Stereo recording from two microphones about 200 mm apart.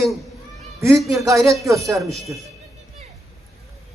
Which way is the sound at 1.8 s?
15° right (ahead or behind).